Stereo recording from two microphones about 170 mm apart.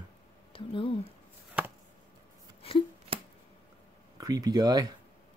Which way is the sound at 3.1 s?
30° right (ahead or behind).